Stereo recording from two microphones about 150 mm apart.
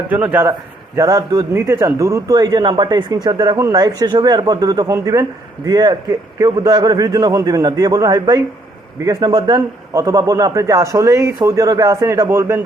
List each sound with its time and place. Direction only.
0.1 s a man's voice: 10° right (ahead or behind)